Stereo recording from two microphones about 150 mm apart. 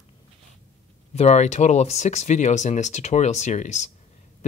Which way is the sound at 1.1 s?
45° left (ahead or behind).